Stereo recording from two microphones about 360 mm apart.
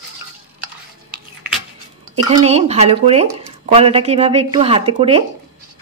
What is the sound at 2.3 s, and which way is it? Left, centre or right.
Speech, centre.